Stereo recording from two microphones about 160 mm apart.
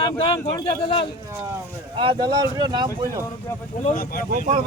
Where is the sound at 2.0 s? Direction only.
30° right (ahead or behind).